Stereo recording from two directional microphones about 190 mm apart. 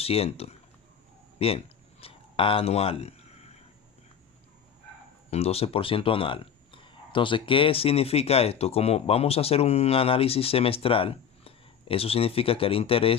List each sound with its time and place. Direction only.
0.0 s speech: 30° left (ahead or behind)
1.4 s a sound: 30° left (ahead or behind)
5.3 s speech: 30° left (ahead or behind)